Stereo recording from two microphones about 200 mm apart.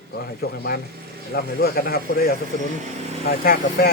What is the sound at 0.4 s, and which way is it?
Speech, 50° left (ahead or behind).